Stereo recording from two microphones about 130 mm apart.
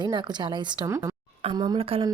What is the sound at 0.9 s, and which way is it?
Speech, 25° right (ahead or behind).